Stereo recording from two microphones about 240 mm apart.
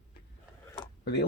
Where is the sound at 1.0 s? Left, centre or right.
Left.